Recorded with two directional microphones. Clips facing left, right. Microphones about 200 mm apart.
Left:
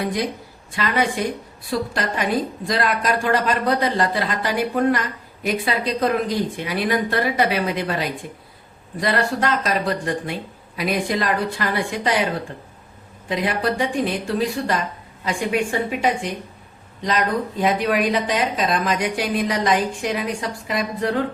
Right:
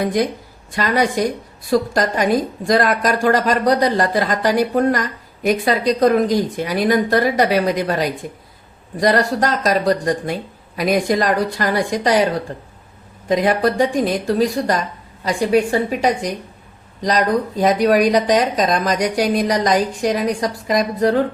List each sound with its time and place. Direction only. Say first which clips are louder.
0.8 s a woman's voice: right 4 dB; 40° right (ahead or behind)